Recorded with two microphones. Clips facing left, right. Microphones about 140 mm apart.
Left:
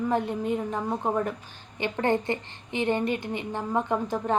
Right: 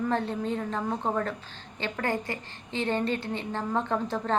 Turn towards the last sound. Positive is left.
turn(degrees=15)  # may be behind; listen again after turning